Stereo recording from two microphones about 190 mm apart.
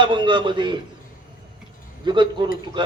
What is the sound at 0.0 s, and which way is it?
Music, 25° right (ahead or behind).